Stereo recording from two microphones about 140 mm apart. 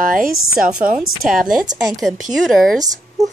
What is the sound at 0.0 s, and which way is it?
A woman's voice, 85° right.